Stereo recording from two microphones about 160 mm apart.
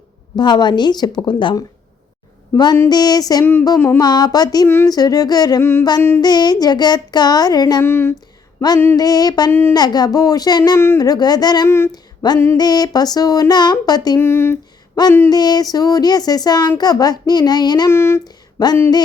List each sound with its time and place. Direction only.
0.3 s speech: 25° left (ahead or behind)
9.5 s a woman's voice: 15° left (ahead or behind)
9.7 s speech: 25° left (ahead or behind)